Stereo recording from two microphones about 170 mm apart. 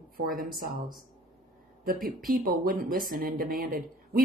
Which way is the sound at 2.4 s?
60° right (ahead or behind).